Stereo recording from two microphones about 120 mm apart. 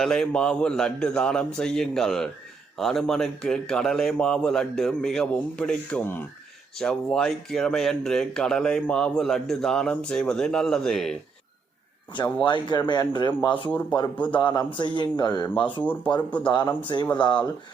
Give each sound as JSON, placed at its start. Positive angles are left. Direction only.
{"t": 0.0, "sound": "speech", "side_deg": 5}
{"t": 12.4, "sound": "speech", "side_deg": 40}
{"t": 15.6, "sound": "speech", "side_deg": 15}
{"t": 16.5, "sound": "speech", "side_deg": 40}